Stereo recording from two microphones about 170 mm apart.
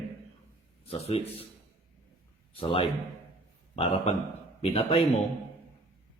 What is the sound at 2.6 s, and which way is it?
A man's voice, 30° left (ahead or behind).